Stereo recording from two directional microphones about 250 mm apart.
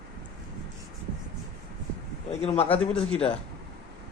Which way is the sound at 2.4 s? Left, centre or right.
Left.